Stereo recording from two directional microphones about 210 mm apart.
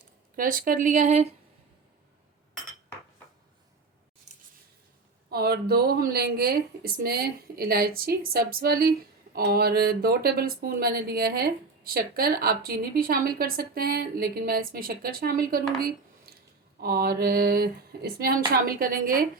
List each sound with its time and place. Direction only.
0.3 s speech: 40° right (ahead or behind)
4.3 s a sound: 35° right (ahead or behind)
5.3 s speech: 50° right (ahead or behind)
16.8 s speech: 45° right (ahead or behind)